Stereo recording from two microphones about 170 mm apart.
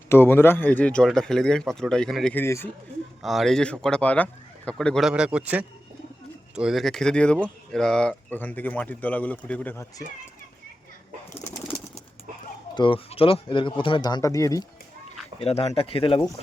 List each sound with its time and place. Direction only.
0.1 s speech: 15° left (ahead or behind)
3.2 s speech: centre (ahead or behind)
12.7 s speech: 30° left (ahead or behind)
15.4 s speech: 35° left (ahead or behind)